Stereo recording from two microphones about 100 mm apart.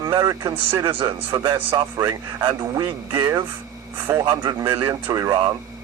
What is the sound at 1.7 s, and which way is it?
Speech, 30° right (ahead or behind).